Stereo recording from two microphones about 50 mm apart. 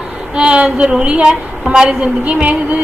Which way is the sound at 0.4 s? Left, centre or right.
Right.